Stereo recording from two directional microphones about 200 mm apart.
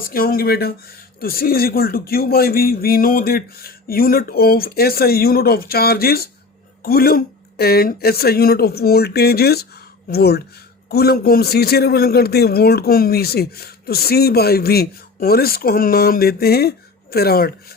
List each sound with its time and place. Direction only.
0.0 s a man's voice: 45° left (ahead or behind)